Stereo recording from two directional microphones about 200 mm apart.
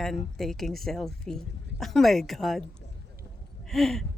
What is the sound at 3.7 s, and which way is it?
Speech, centre (ahead or behind).